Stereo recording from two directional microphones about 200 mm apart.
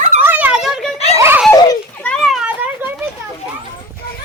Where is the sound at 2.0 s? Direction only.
Centre (ahead or behind).